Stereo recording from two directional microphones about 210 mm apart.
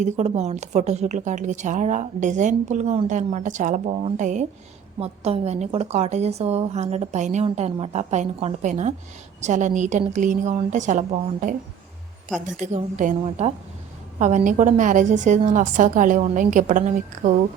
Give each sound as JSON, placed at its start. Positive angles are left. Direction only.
{"t": 0.0, "sound": "a woman's voice", "side_deg": -30}
{"t": 12.5, "sound": "a woman's voice", "side_deg": -35}
{"t": 14.2, "sound": "a woman's voice", "side_deg": -35}